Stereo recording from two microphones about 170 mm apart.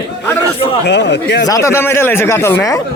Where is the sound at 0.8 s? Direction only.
90° left.